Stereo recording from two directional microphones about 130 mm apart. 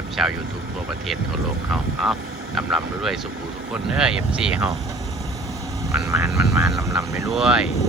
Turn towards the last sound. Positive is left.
turn(degrees=-5)  # may be behind; listen again after turning